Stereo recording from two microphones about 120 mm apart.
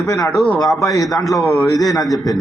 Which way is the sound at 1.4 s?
25° left (ahead or behind).